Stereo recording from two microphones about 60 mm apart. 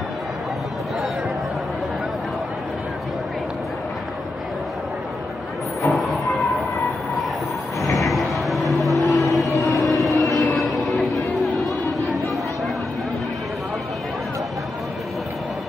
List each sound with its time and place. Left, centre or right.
5.8 s music: centre
7.9 s music: centre
9.6 s a sound: centre
10.1 s vehicle: left
10.7 s music: centre